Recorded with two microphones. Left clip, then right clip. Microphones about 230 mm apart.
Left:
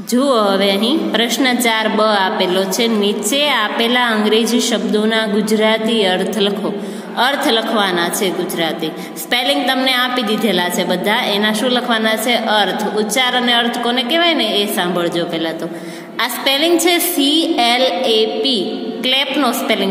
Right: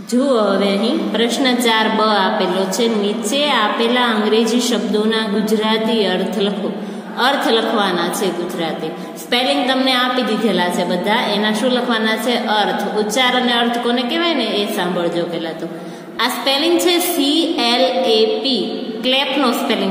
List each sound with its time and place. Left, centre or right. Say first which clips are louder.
0.1 s a woman's voice: left 1 dB; left
9.3 s a woman's voice: left 1 dB; left